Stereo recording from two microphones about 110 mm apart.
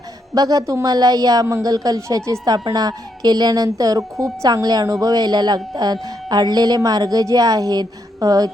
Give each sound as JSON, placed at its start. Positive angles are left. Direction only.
{"t": 0.3, "sound": "speech", "side_deg": -35}